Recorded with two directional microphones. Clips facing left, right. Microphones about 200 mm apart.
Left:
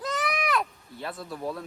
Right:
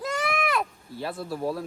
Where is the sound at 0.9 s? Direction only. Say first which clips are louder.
Right 7 dB; 30° right (ahead or behind).